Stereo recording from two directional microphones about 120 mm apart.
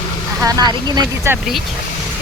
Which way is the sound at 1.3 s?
20° right (ahead or behind).